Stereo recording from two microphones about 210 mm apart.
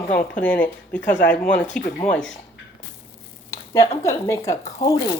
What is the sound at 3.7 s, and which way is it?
Speech, 15° left (ahead or behind).